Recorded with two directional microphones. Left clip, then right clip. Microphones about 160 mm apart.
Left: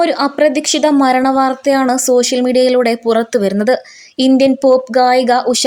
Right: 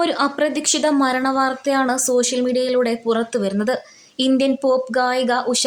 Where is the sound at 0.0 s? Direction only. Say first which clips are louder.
Left 7 dB; 35° left (ahead or behind).